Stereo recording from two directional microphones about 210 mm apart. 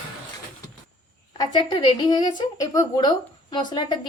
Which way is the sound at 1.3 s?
20° left (ahead or behind).